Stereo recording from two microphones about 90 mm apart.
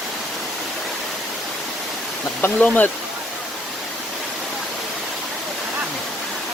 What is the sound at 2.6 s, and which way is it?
Speech, 15° left (ahead or behind).